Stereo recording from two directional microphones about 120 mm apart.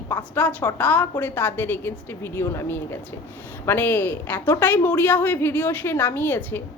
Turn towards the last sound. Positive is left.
turn(degrees=15)  # may be behind; listen again after turning